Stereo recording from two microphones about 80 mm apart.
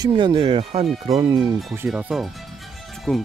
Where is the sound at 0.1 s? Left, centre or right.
Right.